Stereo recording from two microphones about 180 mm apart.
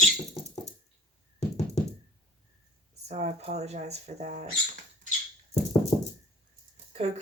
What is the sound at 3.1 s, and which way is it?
Speech, 35° right (ahead or behind).